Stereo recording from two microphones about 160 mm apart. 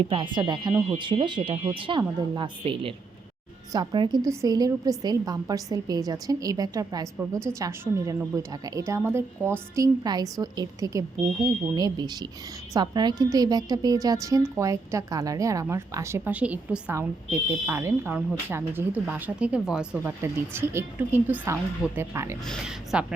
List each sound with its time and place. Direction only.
0.0 s a woman's voice: 30° right (ahead or behind); by 20.1 s 5° right (ahead or behind)
20.2 s a woman's voice: 15° right (ahead or behind)
22.4 s speech: 5° right (ahead or behind)